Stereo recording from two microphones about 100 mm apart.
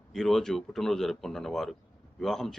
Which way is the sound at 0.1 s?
5° left (ahead or behind).